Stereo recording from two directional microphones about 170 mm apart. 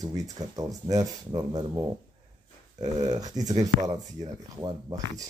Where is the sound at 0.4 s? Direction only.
25° right (ahead or behind).